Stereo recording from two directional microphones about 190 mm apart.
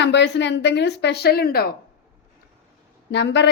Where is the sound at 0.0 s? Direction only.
65° left (ahead or behind).